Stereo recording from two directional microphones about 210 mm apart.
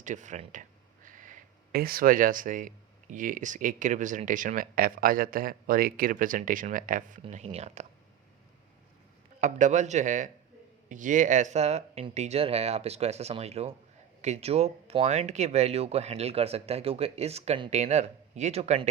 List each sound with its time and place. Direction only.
0.0 s speech: 35° right (ahead or behind)
9.4 s speech: 35° right (ahead or behind)